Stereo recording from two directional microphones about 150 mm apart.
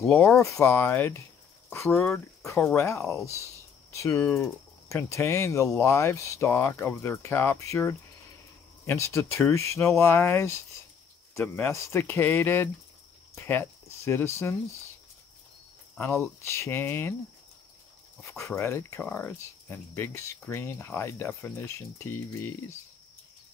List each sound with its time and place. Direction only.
0.4 s speech: 20° left (ahead or behind)
15.9 s speech: 15° left (ahead or behind)
18.6 s speech: 15° left (ahead or behind)